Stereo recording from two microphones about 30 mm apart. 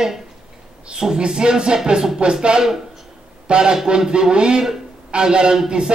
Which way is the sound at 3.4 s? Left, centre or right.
Right.